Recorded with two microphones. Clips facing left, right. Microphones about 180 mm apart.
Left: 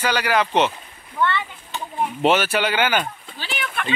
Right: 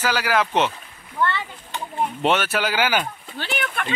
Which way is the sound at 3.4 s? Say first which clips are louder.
Right 2 dB; 50° right (ahead or behind).